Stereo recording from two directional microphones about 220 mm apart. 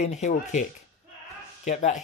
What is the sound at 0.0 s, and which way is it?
Speech, 30° left (ahead or behind).